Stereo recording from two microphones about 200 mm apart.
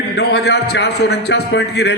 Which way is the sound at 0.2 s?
55° left (ahead or behind).